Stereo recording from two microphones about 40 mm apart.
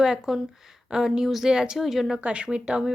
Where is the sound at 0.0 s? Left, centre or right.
Centre.